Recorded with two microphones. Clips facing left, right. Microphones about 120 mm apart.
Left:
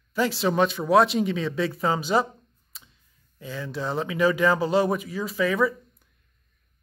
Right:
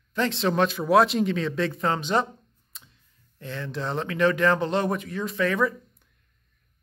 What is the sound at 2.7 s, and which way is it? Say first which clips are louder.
Tick: even; centre (ahead or behind).